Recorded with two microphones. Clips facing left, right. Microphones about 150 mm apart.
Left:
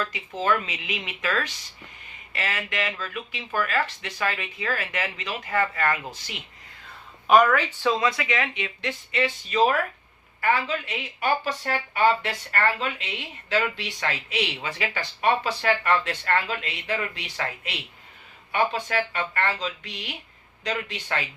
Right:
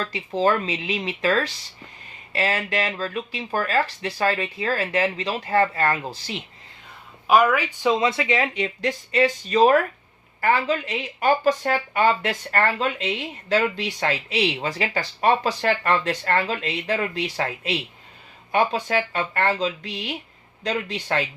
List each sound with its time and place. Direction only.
0.0 s speech: 35° right (ahead or behind)
7.3 s speech: 5° right (ahead or behind); by 21.2 s 40° right (ahead or behind)